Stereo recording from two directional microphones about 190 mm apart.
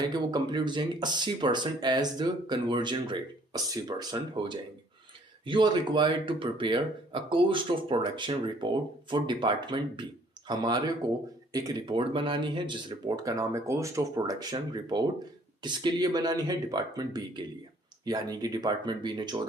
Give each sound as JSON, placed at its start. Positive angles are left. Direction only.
{"t": 0.1, "sound": "speech", "side_deg": -20}